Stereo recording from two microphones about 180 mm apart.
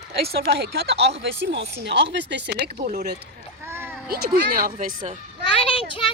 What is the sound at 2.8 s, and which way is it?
Speech, 45° right (ahead or behind).